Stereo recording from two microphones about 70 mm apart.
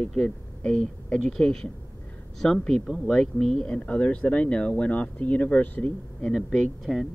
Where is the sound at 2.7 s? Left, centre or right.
Centre; by 5.9 s left.